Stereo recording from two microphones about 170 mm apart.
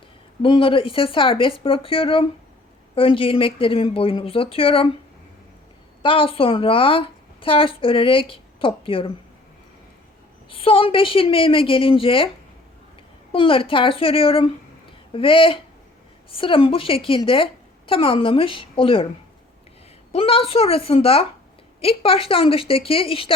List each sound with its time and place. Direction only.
0.4 s a woman's voice: 30° left (ahead or behind)
6.0 s a woman's voice: 30° left (ahead or behind)
10.5 s a woman's voice: 30° left (ahead or behind)
13.3 s a woman's voice: 30° left (ahead or behind)
20.1 s a woman's voice: 35° left (ahead or behind)